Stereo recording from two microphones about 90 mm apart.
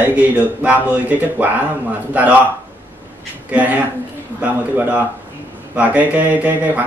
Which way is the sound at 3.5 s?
15° right (ahead or behind).